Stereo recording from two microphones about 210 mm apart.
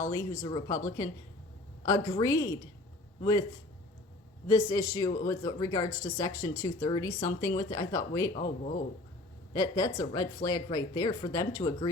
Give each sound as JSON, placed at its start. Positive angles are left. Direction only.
{"t": 0.1, "sound": "a man's voice", "side_deg": 20}
{"t": 4.4, "sound": "speech", "side_deg": 20}
{"t": 8.3, "sound": "speech", "side_deg": 35}
{"t": 9.5, "sound": "speech", "side_deg": 15}